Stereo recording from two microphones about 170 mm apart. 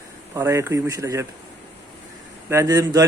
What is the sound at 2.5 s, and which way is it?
Speech, 20° right (ahead or behind).